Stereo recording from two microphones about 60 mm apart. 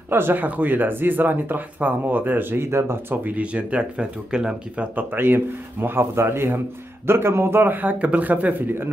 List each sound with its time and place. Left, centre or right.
0.1 s speech: right
3.3 s speech: right
4.9 s speech: right